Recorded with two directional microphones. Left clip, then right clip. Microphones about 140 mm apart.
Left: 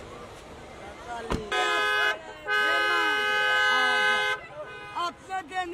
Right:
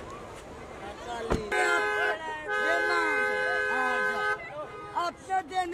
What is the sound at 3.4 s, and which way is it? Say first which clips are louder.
Siren: left 5 dB; 30° left (ahead or behind).